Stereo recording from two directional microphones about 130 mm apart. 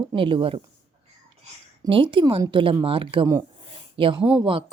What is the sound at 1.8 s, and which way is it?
A woman's voice, 40° right (ahead or behind).